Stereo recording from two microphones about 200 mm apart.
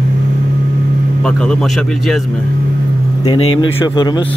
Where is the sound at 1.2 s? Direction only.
5° left (ahead or behind).